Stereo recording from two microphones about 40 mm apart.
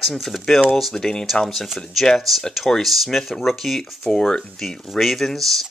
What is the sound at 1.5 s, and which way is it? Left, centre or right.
Speech, centre.